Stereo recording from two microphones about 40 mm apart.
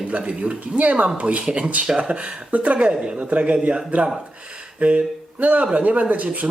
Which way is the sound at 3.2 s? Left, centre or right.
Right.